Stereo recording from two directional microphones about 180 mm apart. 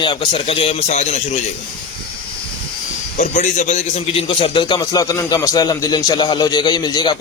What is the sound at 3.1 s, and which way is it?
A man's voice, 45° left (ahead or behind).